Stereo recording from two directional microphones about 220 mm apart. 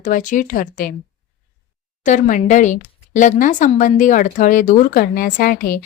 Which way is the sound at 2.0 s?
35° left (ahead or behind).